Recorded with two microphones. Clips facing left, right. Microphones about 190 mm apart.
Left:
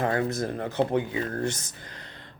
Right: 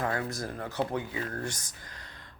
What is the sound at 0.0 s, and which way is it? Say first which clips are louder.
Speech: left 6 dB; 25° left (ahead or behind).